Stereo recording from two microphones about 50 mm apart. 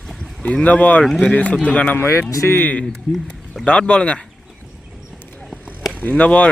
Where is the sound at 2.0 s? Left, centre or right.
Left.